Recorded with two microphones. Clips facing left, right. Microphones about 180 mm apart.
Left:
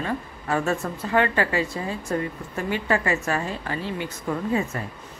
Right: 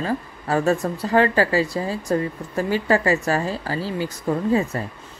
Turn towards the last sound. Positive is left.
turn(degrees=-35)  # may be behind; listen again after turning